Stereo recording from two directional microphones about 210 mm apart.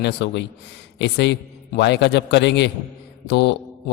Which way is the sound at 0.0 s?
55° left (ahead or behind).